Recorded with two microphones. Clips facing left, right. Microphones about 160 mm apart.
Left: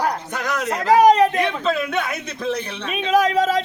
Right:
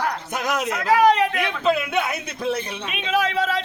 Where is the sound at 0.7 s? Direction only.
40° left (ahead or behind).